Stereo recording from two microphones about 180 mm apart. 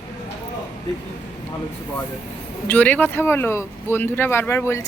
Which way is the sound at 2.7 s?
10° left (ahead or behind).